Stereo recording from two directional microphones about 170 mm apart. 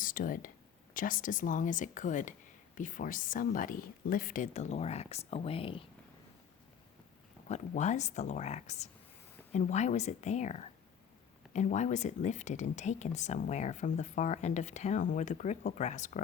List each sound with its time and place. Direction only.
0.0 s speech: 55° left (ahead or behind); by 5.8 s 35° left (ahead or behind)
7.4 s speech: 45° left (ahead or behind)